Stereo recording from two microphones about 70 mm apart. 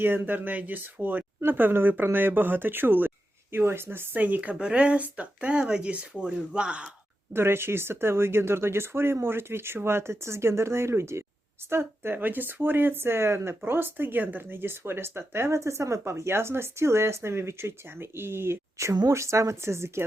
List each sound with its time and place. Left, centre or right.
0.0 s speech: right; by 6.8 s centre
7.3 s speech: right